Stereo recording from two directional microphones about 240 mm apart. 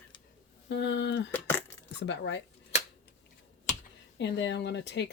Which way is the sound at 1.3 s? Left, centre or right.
Centre.